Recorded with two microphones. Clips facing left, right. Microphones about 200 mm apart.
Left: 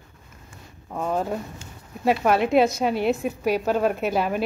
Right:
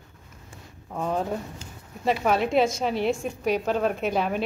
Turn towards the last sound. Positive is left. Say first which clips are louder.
# left 2 dB
turn(degrees=5)  # may be behind; listen again after turning